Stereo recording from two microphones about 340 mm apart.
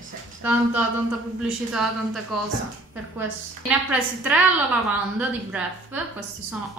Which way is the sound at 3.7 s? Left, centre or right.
Centre.